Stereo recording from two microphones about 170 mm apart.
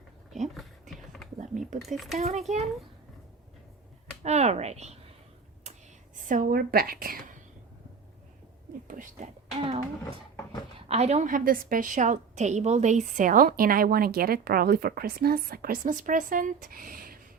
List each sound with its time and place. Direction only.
1.4 s speech: 45° right (ahead or behind)
1.9 s speech: centre (ahead or behind)
2.1 s speech: 40° right (ahead or behind)
4.2 s speech: 40° right (ahead or behind)
5.7 s a sound: 40° right (ahead or behind)
6.2 s a woman's voice: 50° right (ahead or behind)
8.9 s a woman's voice: 45° right (ahead or behind)